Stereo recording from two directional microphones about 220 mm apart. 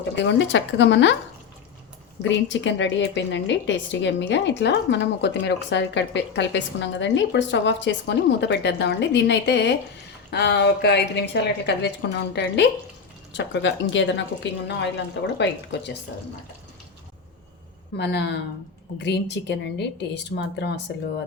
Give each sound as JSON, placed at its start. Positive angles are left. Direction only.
{"t": 0.2, "sound": "speech", "side_deg": 55}
{"t": 2.5, "sound": "a woman's voice", "side_deg": 55}
{"t": 17.9, "sound": "a woman's voice", "side_deg": 50}